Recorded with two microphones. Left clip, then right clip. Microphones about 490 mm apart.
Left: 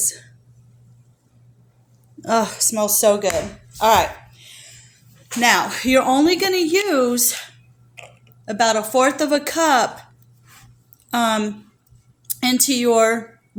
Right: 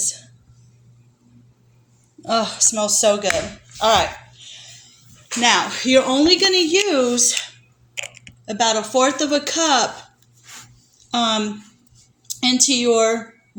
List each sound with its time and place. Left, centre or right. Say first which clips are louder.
2.3 s a woman's voice: even; left
5.4 s a woman's voice: even; left
7.9 s chewing: right 11 dB; left
8.4 s a woman's voice: left 1 dB; left
11.1 s a woman's voice: even; left